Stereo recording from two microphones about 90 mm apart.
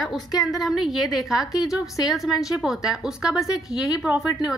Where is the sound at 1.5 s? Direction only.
40° left (ahead or behind).